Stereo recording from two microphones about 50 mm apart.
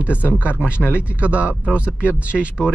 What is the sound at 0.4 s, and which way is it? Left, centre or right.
Speech, right.